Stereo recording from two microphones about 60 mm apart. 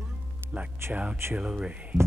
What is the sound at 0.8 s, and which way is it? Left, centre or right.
Speech, right.